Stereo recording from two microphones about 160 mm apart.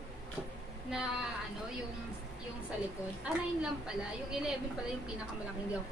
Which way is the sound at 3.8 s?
5° right (ahead or behind).